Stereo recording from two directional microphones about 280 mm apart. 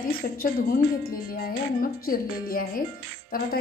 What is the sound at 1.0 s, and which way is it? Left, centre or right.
Speech, left.